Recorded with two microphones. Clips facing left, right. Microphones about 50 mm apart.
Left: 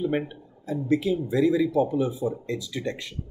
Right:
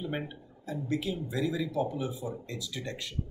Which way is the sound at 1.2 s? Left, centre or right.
Left.